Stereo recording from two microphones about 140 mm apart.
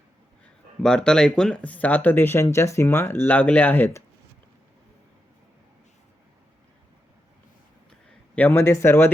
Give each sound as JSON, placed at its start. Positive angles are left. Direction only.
{"t": 0.8, "sound": "speech", "side_deg": 5}
{"t": 8.4, "sound": "speech", "side_deg": 15}